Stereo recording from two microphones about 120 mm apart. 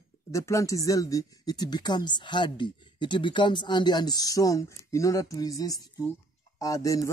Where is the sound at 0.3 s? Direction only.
25° left (ahead or behind).